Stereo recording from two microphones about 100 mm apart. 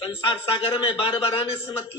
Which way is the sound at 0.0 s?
65° left (ahead or behind).